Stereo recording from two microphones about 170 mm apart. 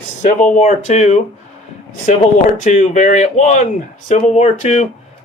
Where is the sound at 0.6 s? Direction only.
45° left (ahead or behind).